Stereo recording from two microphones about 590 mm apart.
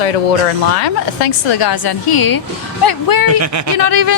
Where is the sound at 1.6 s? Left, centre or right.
Left.